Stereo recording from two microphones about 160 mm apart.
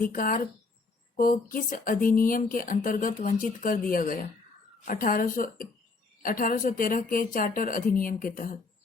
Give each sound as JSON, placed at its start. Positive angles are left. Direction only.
{"t": 0.0, "sound": "speech", "side_deg": 60}